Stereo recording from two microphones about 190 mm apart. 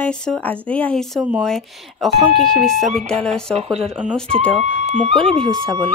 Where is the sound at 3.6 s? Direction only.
30° right (ahead or behind).